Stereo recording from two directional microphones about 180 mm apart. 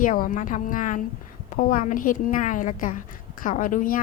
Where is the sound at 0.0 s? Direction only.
50° left (ahead or behind).